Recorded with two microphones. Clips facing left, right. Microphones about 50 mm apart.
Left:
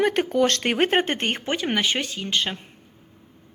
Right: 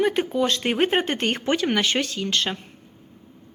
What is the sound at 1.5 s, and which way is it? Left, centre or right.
Speech, centre.